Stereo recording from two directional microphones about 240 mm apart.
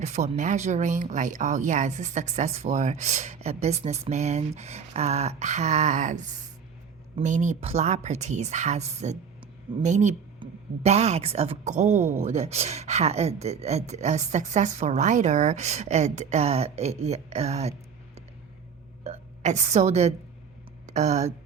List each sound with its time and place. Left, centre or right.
0.0 s a woman's voice: right